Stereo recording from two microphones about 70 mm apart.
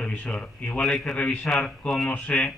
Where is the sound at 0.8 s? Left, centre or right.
Centre.